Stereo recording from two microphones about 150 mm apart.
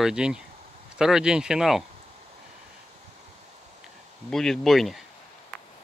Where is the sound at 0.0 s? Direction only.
5° right (ahead or behind).